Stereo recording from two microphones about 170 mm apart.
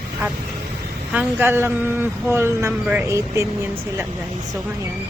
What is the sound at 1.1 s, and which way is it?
A woman's voice, 10° right (ahead or behind).